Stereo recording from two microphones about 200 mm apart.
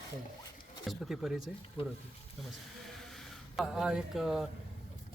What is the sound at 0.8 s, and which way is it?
Speech, centre (ahead or behind).